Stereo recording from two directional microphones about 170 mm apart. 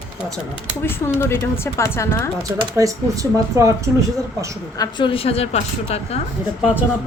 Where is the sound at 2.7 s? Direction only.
20° right (ahead or behind).